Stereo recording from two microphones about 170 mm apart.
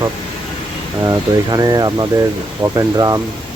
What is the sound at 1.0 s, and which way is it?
Speech, 20° right (ahead or behind).